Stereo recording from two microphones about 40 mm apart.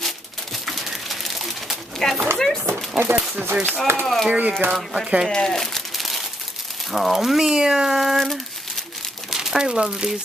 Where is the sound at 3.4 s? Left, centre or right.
Right.